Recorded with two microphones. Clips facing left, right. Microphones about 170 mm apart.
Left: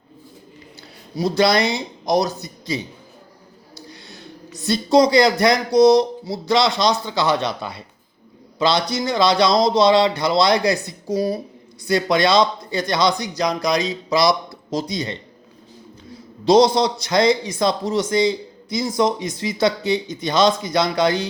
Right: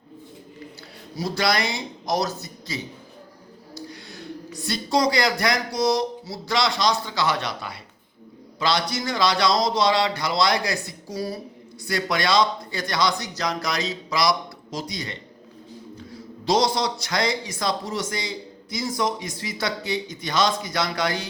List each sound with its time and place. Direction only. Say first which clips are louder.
1.1 s a man's voice: left 7 dB; 20° left (ahead or behind)